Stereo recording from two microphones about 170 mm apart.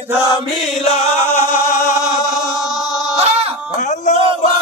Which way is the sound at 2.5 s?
Centre (ahead or behind).